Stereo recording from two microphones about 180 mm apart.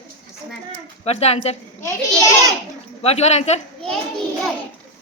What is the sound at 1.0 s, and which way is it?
Speech, 35° left (ahead or behind).